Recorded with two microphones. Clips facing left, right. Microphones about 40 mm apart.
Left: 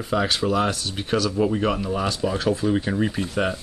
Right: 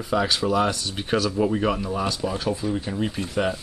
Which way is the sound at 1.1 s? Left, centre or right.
Centre.